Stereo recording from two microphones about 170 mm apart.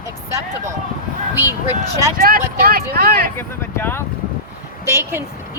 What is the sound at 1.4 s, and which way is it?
Speech, 15° right (ahead or behind).